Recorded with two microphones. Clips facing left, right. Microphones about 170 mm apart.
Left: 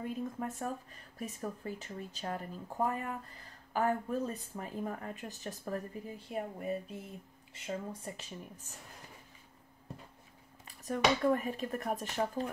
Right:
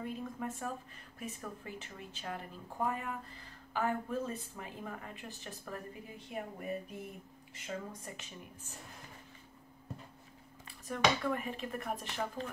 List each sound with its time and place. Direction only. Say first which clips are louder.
0.0 s speech: left 2 dB; 45° left (ahead or behind)
10.9 s speech: left 3 dB; 40° left (ahead or behind)